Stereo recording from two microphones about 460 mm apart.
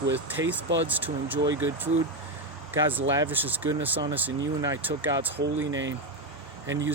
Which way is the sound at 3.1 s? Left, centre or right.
Centre.